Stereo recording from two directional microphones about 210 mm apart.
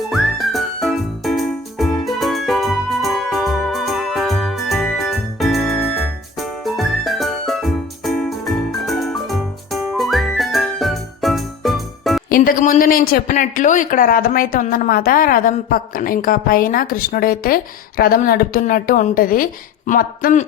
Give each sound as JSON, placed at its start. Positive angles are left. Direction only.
{"t": 0.1, "sound": "music", "side_deg": 0}
{"t": 8.9, "sound": "whistle", "side_deg": 0}
{"t": 12.3, "sound": "a man's voice", "side_deg": 40}